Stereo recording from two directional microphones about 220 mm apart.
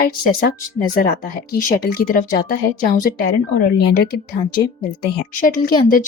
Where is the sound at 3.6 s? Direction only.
45° left (ahead or behind).